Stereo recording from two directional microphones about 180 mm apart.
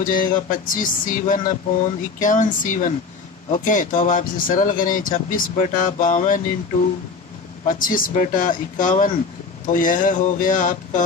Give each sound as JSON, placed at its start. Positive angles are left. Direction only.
{"t": 0.0, "sound": "speech", "side_deg": 50}
{"t": 7.7, "sound": "speech", "side_deg": 50}